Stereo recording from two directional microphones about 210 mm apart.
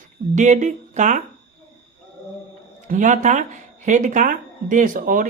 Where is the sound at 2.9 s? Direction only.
35° right (ahead or behind).